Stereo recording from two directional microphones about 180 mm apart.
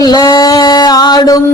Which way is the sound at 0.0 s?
20° left (ahead or behind).